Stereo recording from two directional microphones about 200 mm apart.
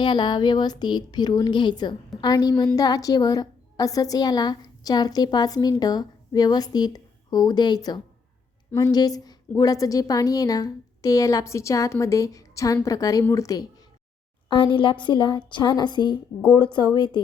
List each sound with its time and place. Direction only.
0.0 s a woman's voice: 20° left (ahead or behind)